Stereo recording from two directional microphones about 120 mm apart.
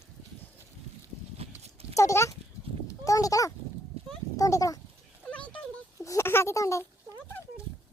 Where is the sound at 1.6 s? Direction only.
60° right (ahead or behind).